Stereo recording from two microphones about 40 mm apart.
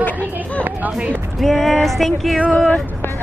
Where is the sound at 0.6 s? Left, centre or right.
Right.